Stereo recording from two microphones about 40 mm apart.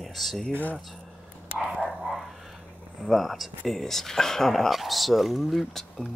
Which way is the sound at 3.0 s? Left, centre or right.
Centre.